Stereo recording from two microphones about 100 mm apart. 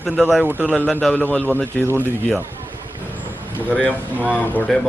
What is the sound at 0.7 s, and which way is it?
Speech, 15° left (ahead or behind).